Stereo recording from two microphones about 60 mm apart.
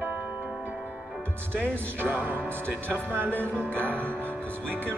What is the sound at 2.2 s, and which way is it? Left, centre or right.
Speech, right.